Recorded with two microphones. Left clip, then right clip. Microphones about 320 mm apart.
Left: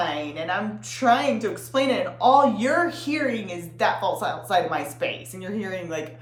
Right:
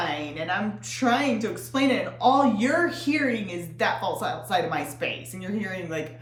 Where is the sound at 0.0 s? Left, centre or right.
Centre.